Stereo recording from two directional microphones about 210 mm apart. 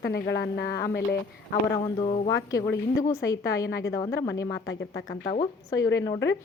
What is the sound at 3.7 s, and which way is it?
A woman's voice, 55° left (ahead or behind).